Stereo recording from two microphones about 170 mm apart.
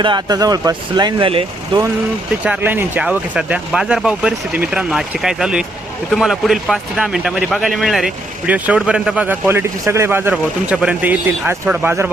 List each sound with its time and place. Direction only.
0.0 s speech: 25° right (ahead or behind)
2.4 s speech: 10° right (ahead or behind)